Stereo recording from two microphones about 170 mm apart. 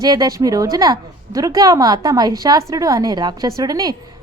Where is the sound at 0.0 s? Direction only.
20° right (ahead or behind).